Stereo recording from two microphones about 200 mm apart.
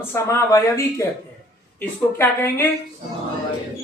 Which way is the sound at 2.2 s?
10° left (ahead or behind).